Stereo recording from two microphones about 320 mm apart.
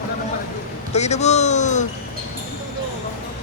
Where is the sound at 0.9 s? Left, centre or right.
Left.